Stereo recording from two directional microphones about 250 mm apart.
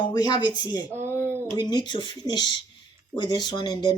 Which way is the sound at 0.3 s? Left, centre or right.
Centre.